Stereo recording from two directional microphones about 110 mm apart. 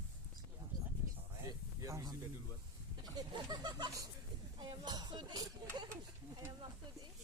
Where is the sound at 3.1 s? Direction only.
40° right (ahead or behind).